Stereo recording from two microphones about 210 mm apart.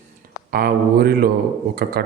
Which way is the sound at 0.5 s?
45° right (ahead or behind).